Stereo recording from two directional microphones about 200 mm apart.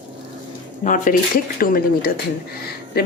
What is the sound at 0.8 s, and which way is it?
A woman's voice, 40° left (ahead or behind).